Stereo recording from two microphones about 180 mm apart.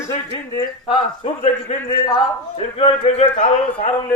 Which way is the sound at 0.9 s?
35° left (ahead or behind).